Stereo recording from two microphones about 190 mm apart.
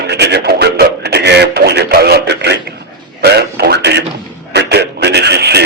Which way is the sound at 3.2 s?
55° right (ahead or behind).